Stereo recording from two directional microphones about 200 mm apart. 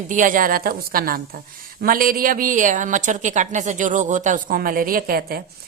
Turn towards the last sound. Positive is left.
turn(degrees=-50)  # may be behind; listen again after turning